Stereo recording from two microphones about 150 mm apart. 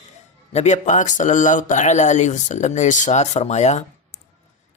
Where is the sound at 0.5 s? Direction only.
50° left (ahead or behind).